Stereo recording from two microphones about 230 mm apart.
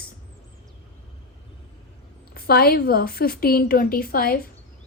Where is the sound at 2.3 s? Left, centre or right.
Left.